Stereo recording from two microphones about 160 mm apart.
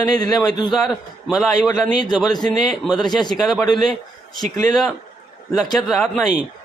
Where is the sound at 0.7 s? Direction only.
Centre (ahead or behind).